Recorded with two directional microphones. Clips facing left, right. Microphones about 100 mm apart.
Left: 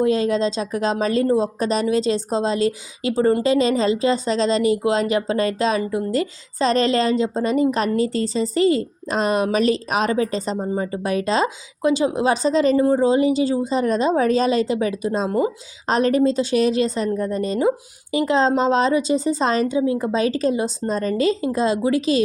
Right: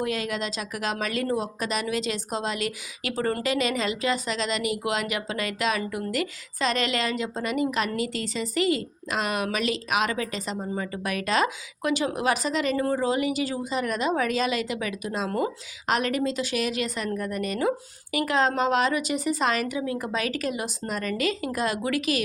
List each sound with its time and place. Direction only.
0.0 s speech: 30° left (ahead or behind)